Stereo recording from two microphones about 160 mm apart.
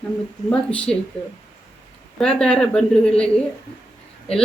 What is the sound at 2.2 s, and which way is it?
A woman's voice, 5° left (ahead or behind).